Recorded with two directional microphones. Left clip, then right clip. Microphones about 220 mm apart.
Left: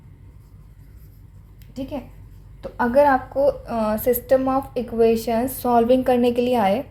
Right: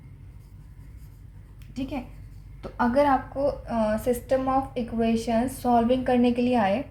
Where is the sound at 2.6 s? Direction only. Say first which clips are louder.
Left 6 dB; 25° left (ahead or behind).